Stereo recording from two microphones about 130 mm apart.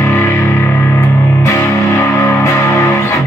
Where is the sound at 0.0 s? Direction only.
20° left (ahead or behind).